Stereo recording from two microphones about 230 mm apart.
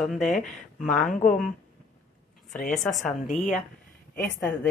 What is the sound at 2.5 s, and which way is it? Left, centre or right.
Speech, left.